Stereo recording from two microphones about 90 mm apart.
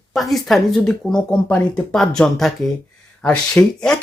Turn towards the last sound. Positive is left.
turn(degrees=10)  # may be behind; listen again after turning